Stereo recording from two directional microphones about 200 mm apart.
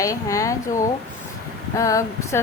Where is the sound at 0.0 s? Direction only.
15° left (ahead or behind).